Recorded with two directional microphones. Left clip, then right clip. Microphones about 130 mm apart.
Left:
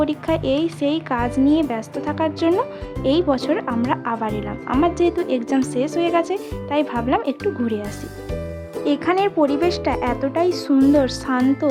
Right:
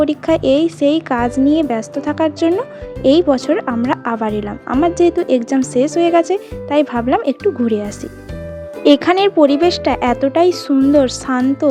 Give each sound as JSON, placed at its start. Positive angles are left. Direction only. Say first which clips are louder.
{"t": 0.0, "sound": "speech", "louder": "right 6 dB", "side_deg": -30}
{"t": 8.8, "sound": "speech", "louder": "right 8 dB", "side_deg": -40}